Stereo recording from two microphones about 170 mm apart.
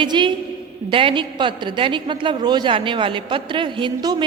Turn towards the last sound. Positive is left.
turn(degrees=-25)  # may be behind; listen again after turning